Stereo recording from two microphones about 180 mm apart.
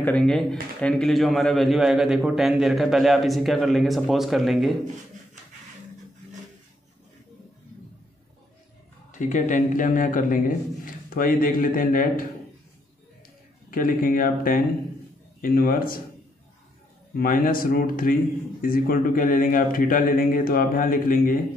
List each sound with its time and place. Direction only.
0.0 s a man's voice: 5° left (ahead or behind)
9.2 s a man's voice: 45° left (ahead or behind)
13.7 s a man's voice: 50° left (ahead or behind)
17.1 s a man's voice: 50° left (ahead or behind)